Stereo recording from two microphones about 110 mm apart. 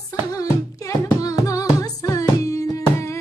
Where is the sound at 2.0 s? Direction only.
30° left (ahead or behind).